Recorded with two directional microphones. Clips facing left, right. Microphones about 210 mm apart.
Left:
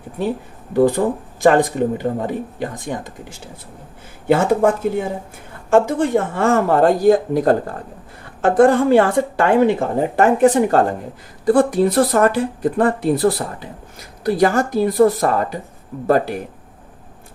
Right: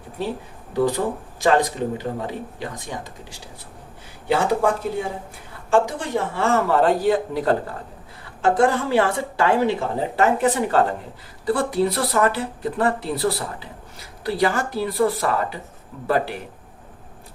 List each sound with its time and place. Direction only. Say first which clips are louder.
0.7 s speech: left 6 dB; 50° left (ahead or behind)